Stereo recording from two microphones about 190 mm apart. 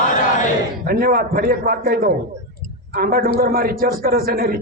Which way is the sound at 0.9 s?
50° right (ahead or behind).